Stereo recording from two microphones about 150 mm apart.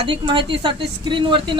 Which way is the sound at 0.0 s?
35° right (ahead or behind).